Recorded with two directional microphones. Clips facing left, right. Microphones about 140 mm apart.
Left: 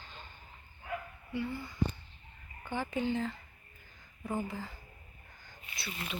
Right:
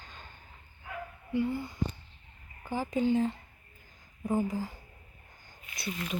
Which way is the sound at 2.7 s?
35° right (ahead or behind).